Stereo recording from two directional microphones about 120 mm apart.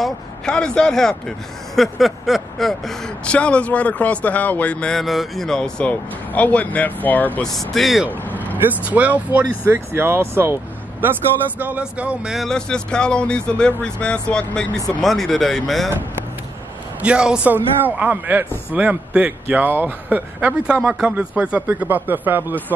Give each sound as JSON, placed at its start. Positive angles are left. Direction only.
{"t": 0.0, "sound": "speech", "side_deg": 5}
{"t": 7.3, "sound": "speech", "side_deg": 5}
{"t": 8.8, "sound": "speech", "side_deg": -15}
{"t": 12.4, "sound": "speech", "side_deg": 5}
{"t": 17.0, "sound": "speech", "side_deg": -10}